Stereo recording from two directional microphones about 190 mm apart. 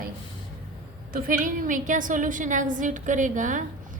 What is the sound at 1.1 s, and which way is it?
A woman's voice, 45° right (ahead or behind).